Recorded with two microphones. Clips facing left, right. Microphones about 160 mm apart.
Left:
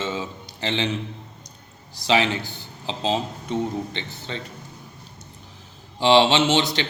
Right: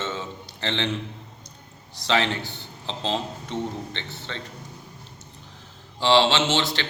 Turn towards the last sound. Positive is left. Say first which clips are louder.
# left 4 dB
turn(degrees=15)  # may be behind; listen again after turning